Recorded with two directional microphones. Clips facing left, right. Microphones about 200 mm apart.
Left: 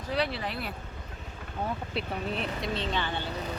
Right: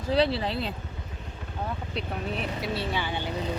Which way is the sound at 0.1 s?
30° right (ahead or behind).